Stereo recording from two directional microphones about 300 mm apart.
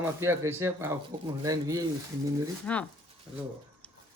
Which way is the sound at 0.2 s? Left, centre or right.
Centre.